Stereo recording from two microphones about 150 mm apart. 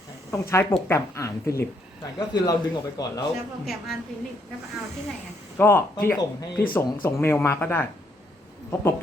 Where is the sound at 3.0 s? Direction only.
25° left (ahead or behind).